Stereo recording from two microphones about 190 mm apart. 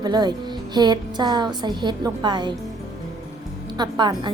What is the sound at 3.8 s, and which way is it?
Speech, 20° right (ahead or behind).